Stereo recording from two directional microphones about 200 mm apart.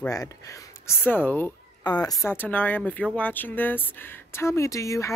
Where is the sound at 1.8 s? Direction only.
20° left (ahead or behind).